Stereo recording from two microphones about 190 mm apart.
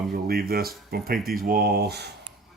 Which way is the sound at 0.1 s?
55° right (ahead or behind).